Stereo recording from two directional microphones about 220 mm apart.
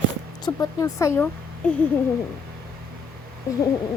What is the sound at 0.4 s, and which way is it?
Speech, 15° left (ahead or behind).